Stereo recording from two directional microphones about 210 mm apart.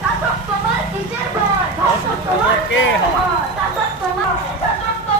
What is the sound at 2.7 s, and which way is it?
Speech, 60° left (ahead or behind).